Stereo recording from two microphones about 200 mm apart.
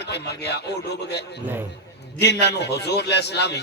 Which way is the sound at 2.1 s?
55° left (ahead or behind).